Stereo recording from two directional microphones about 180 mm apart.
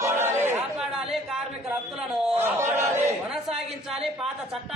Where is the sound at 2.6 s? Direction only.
15° right (ahead or behind).